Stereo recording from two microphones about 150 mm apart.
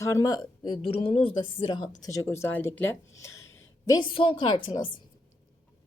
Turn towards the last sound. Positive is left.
turn(degrees=35)  # may be behind; listen again after turning